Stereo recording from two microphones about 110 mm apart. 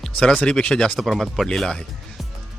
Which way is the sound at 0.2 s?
10° left (ahead or behind).